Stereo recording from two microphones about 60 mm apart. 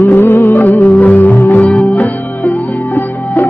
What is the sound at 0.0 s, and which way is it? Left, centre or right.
Music, left.